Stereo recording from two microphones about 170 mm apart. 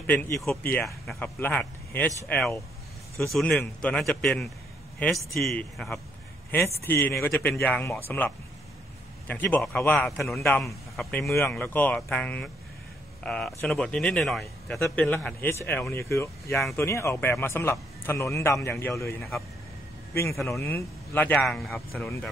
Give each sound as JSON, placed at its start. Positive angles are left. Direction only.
{"t": 0.0, "sound": "a man's voice", "side_deg": 10}
{"t": 9.3, "sound": "a man's voice", "side_deg": 10}
{"t": 20.5, "sound": "a man's voice", "side_deg": 15}